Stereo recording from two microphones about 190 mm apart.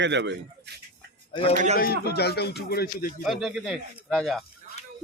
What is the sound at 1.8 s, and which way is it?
Speech, 55° left (ahead or behind).